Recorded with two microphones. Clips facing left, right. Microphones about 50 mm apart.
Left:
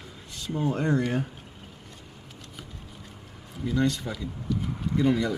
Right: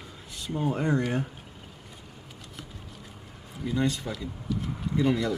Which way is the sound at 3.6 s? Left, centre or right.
Centre.